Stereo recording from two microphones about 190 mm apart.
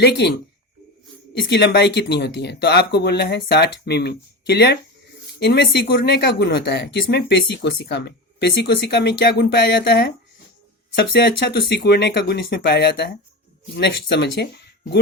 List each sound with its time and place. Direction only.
0.0 s speech: 60° left (ahead or behind)